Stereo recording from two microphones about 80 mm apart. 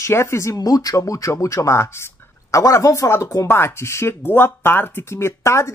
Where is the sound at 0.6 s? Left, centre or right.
Left.